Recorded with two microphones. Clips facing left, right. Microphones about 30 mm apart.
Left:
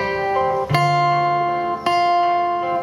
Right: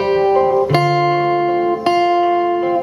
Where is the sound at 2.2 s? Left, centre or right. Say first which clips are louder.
Right 3 dB; left.